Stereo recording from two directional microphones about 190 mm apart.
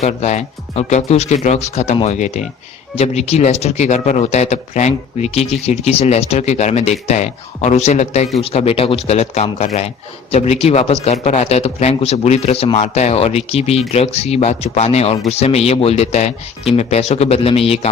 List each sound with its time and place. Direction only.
0.0 s speech: 35° left (ahead or behind)